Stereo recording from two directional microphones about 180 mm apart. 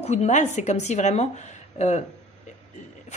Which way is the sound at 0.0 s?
35° left (ahead or behind).